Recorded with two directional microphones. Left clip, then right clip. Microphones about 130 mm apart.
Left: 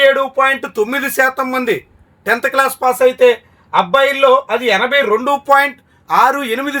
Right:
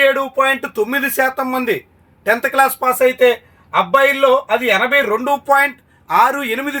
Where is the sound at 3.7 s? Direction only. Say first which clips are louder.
Left 1 dB; 40° left (ahead or behind).